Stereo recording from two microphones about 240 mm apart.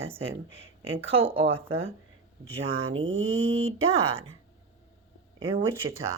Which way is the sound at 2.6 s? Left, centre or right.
Right.